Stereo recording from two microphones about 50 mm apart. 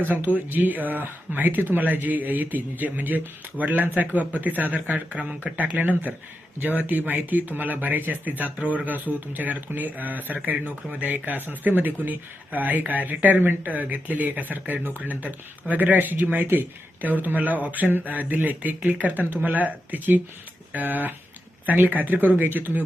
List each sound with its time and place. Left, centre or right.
0.0 s speech: right